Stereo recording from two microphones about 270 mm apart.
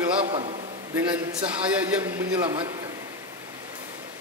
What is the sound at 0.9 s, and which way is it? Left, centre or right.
A man's voice, centre.